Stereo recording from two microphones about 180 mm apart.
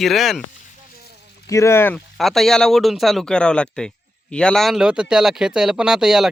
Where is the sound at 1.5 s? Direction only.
15° left (ahead or behind).